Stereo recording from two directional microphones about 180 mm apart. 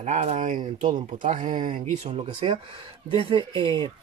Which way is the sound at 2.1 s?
30° right (ahead or behind).